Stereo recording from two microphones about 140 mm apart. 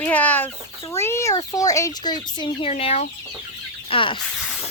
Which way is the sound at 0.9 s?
20° left (ahead or behind).